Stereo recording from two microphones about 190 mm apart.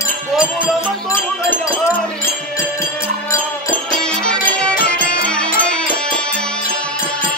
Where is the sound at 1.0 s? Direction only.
10° left (ahead or behind).